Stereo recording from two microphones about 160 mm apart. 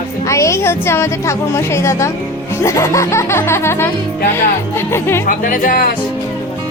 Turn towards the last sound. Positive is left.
turn(degrees=60)  # may be behind; listen again after turning